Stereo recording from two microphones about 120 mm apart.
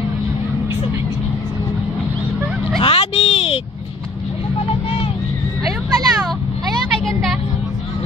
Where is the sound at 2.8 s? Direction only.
55° left (ahead or behind).